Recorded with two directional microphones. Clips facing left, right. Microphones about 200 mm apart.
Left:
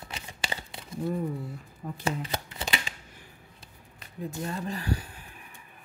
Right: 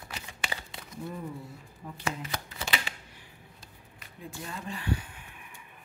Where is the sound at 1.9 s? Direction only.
30° left (ahead or behind).